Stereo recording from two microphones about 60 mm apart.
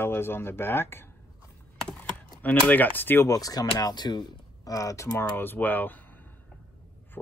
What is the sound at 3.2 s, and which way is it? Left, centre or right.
Speech, left.